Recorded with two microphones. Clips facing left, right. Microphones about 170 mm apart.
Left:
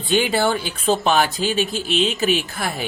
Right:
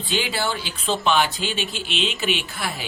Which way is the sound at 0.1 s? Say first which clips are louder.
Left 7 dB; 50° left (ahead or behind).